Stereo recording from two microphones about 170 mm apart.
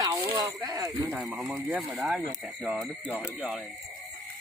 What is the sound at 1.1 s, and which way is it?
Speech, 5° right (ahead or behind).